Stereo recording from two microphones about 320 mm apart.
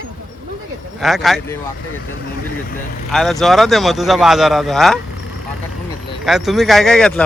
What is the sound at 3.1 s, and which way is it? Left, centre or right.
Speech, centre.